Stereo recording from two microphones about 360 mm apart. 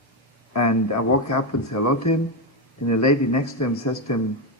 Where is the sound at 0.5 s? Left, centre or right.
Left.